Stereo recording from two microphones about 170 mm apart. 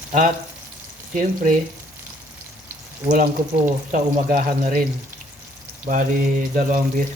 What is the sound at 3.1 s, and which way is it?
Speech, 50° right (ahead or behind).